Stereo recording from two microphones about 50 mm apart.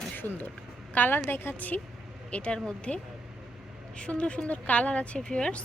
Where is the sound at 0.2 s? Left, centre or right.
Left.